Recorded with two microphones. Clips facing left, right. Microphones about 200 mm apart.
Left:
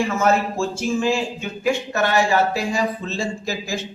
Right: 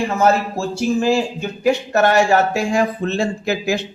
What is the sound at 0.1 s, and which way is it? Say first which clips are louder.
Speech: right 3 dB; 35° right (ahead or behind).